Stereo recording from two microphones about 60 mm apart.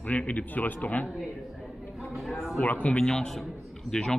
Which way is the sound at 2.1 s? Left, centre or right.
Centre.